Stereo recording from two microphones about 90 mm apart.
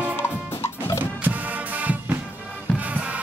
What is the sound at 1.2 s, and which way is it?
Music, 15° right (ahead or behind).